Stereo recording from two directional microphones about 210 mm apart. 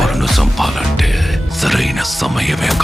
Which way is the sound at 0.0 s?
Centre (ahead or behind).